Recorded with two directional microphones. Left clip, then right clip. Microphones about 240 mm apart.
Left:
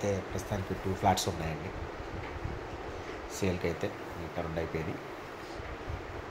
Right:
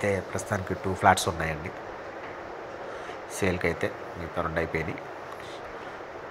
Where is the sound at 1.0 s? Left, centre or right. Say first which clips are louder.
Right 7 dB; centre.